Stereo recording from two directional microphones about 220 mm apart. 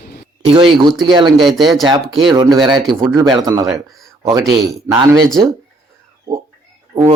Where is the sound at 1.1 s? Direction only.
20° right (ahead or behind).